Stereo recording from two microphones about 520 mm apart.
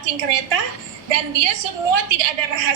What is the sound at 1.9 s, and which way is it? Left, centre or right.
Speech, right.